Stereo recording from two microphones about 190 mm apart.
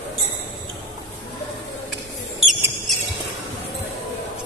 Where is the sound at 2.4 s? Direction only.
Centre (ahead or behind).